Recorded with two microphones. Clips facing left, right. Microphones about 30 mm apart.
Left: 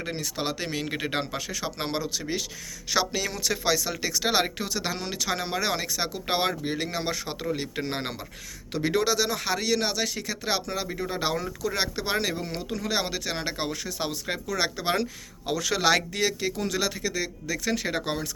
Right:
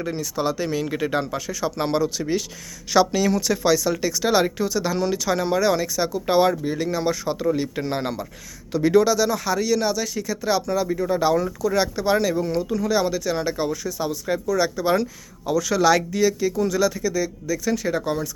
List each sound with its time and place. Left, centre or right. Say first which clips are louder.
0.0 s speech: right 6 dB; left